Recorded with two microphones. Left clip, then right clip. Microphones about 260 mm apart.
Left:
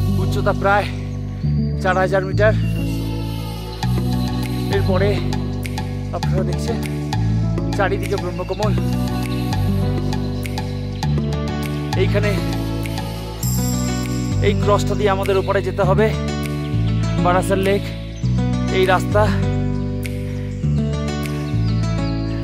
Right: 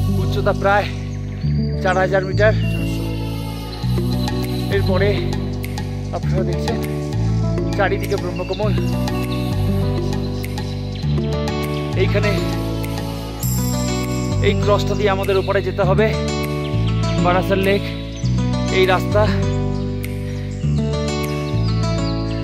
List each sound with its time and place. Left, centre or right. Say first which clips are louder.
0.4 s music: right 1 dB; centre
4.6 s music: even; centre
7.7 s music: even; centre
12.0 s music: right 1 dB; centre
14.4 s music: even; centre
17.2 s music: even; centre
18.8 s music: even; centre